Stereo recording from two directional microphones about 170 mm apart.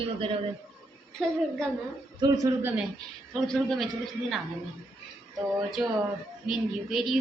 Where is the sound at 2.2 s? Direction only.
20° right (ahead or behind).